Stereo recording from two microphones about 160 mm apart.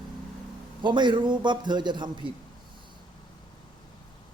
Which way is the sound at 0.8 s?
30° right (ahead or behind).